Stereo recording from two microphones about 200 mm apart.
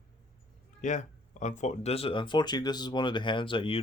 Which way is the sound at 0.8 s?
35° left (ahead or behind).